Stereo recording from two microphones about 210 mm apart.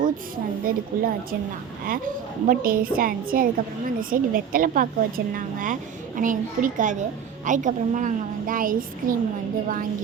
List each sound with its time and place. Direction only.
0.6 s a woman's voice: 45° right (ahead or behind)